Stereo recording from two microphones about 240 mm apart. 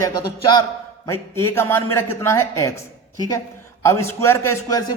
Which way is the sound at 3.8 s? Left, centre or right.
Centre.